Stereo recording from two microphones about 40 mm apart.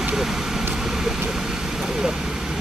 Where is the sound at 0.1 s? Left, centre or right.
Centre.